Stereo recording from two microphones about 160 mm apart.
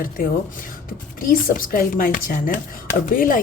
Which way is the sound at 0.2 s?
65° left (ahead or behind).